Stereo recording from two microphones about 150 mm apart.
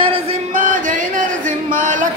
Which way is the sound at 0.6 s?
60° right (ahead or behind).